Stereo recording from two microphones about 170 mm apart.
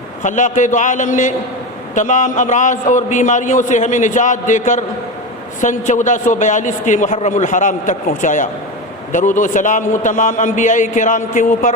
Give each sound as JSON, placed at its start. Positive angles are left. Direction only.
{"t": 0.2, "sound": "a man's voice", "side_deg": 45}